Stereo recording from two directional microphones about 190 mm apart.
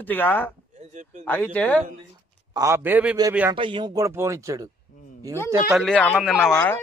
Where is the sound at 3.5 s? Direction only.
25° right (ahead or behind).